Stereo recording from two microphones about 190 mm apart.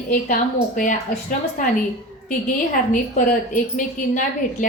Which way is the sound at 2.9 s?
45° left (ahead or behind).